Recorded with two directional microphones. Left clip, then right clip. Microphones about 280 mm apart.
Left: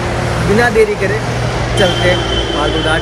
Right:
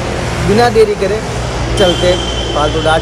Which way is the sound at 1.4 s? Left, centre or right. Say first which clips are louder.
Right 2 dB; left.